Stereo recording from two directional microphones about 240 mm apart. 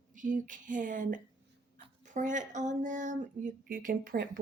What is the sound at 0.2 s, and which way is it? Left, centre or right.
Speech, right.